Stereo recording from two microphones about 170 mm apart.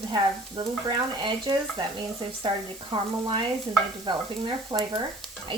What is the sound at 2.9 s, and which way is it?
Speech, 30° right (ahead or behind).